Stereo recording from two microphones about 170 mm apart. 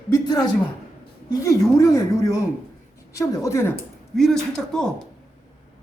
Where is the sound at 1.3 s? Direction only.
20° left (ahead or behind).